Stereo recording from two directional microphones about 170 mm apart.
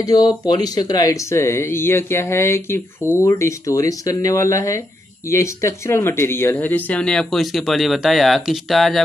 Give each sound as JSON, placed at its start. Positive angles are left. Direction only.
{"t": 0.0, "sound": "speech", "side_deg": 20}